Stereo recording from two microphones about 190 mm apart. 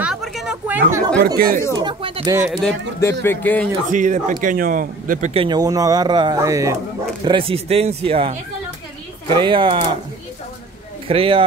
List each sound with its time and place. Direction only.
0.0 s a sound: centre (ahead or behind)
1.2 s speech: 50° right (ahead or behind)
1.8 s speech: 25° right (ahead or behind)
2.3 s speech: 5° right (ahead or behind)
3.0 s speech: 15° left (ahead or behind)
3.9 s speech: 40° right (ahead or behind)
5.3 s speech: 25° right (ahead or behind)
7.2 s speech: 30° right (ahead or behind)
11.1 s speech: 30° right (ahead or behind)